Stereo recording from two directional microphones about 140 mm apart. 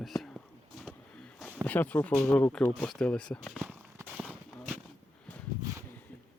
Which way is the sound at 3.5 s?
5° right (ahead or behind).